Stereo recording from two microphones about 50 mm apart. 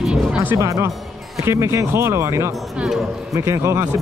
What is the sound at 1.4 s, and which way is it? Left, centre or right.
Speech, right.